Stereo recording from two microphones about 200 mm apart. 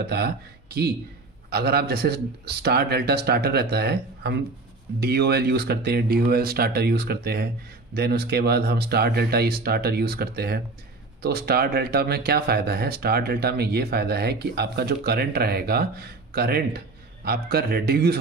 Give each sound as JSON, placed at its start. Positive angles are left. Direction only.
{"t": 0.0, "sound": "speech", "side_deg": -55}